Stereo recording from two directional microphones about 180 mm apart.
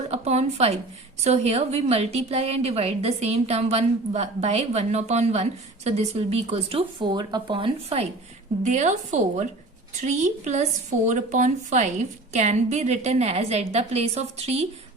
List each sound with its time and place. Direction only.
0.1 s a sound: 35° right (ahead or behind)
1.2 s a woman's voice: 35° right (ahead or behind)
8.6 s a woman's voice: 40° right (ahead or behind)